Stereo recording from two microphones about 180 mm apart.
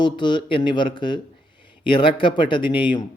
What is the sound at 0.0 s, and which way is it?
A man's voice, 25° left (ahead or behind).